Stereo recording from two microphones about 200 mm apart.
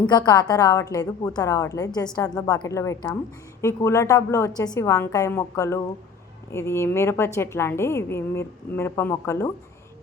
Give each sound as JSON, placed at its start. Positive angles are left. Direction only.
{"t": 0.0, "sound": "a woman's voice", "side_deg": 20}